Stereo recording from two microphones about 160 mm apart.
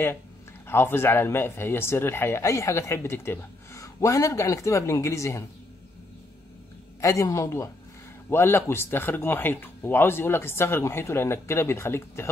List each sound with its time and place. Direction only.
0.7 s speech: 15° left (ahead or behind)
7.0 s a man's voice: 20° left (ahead or behind)